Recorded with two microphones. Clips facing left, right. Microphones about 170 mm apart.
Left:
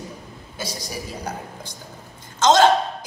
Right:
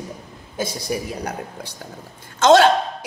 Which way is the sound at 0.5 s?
55° right (ahead or behind).